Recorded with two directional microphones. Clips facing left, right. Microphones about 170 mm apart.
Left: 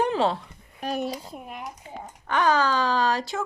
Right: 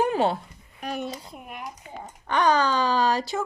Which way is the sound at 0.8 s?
35° left (ahead or behind).